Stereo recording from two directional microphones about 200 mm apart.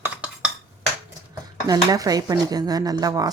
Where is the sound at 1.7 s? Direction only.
20° right (ahead or behind).